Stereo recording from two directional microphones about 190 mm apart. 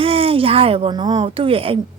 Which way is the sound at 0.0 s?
30° right (ahead or behind).